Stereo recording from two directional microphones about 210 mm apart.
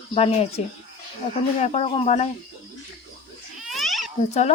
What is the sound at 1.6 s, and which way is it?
Speech, 30° left (ahead or behind).